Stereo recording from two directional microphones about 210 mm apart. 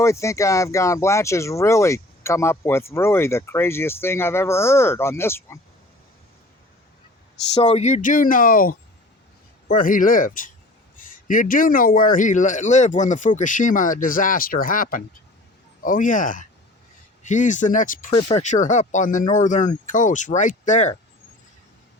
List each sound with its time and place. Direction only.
0.0 s speech: 15° left (ahead or behind)
7.5 s a man's voice: 30° left (ahead or behind)